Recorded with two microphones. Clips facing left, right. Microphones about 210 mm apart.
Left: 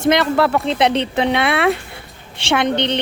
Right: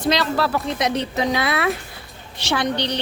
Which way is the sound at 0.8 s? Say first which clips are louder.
Left 5 dB; 30° left (ahead or behind).